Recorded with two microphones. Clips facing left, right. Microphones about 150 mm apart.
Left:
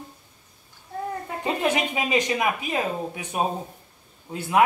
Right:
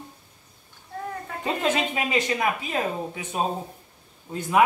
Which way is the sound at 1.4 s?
15° left (ahead or behind).